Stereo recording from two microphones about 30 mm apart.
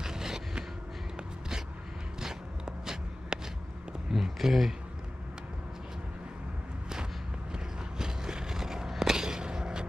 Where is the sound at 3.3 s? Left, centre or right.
Right.